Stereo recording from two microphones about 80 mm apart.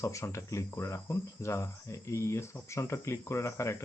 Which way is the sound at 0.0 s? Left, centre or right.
Left.